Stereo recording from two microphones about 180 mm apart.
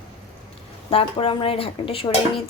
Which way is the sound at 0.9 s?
30° left (ahead or behind).